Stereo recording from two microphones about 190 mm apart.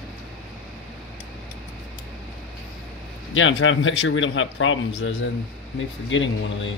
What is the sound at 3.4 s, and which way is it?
Speech, 90° left.